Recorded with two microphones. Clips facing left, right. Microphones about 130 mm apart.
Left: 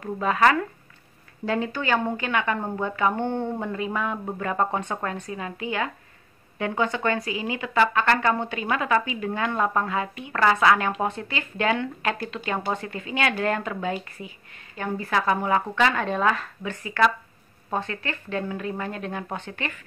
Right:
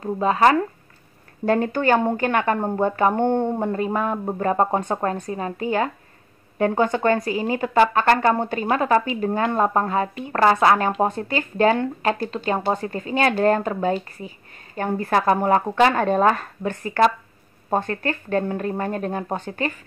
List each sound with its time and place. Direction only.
0.0 s a woman's voice: 30° right (ahead or behind)
1.4 s a woman's voice: 50° right (ahead or behind)